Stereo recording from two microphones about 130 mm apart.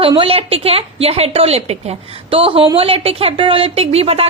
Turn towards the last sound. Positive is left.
turn(degrees=-50)  # may be behind; listen again after turning